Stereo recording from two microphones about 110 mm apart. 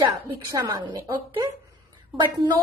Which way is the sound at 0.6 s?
45° right (ahead or behind).